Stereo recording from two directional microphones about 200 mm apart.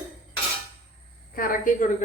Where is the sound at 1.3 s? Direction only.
45° left (ahead or behind).